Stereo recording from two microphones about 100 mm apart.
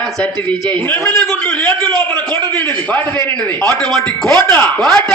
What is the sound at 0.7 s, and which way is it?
A man's voice, 20° left (ahead or behind).